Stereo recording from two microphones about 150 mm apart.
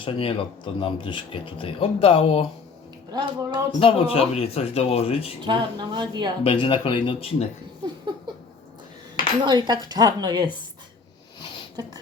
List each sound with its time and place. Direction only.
0.0 s speech: 35° left (ahead or behind)
3.1 s speech: 30° right (ahead or behind)
3.8 s speech: 40° left (ahead or behind)
5.5 s a woman's voice: 30° right (ahead or behind)
6.4 s speech: 35° left (ahead or behind)
9.4 s speech: 30° right (ahead or behind)